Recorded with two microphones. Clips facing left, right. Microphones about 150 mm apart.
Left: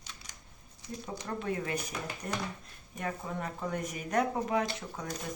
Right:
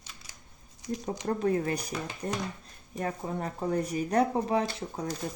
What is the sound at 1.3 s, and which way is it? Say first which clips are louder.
Speech: right 7 dB; 40° right (ahead or behind).